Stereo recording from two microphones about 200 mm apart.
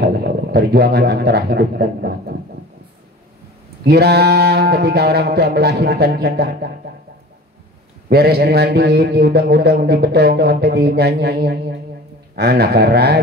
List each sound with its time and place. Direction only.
0.0 s speech: 50° right (ahead or behind)
3.8 s a man's voice: 55° right (ahead or behind)
8.1 s a man's voice: 50° right (ahead or behind)